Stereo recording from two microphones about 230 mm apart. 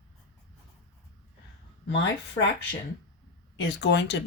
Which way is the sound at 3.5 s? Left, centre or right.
Left.